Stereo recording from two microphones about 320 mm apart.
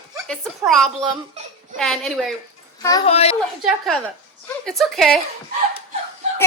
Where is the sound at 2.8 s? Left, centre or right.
Centre.